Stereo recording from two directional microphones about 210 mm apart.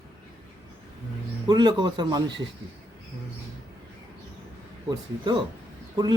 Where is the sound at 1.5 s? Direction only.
20° right (ahead or behind).